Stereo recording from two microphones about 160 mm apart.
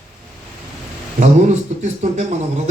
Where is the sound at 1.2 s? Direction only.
45° right (ahead or behind).